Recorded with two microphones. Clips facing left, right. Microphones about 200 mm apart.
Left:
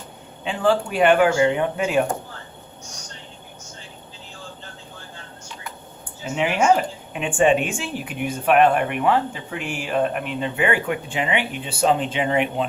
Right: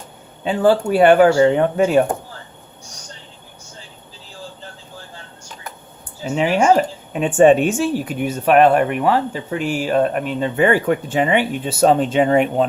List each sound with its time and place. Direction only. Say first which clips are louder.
0.9 s speech: right 6 dB; 40° right (ahead or behind)
6.4 s speech: right 4 dB; 40° right (ahead or behind)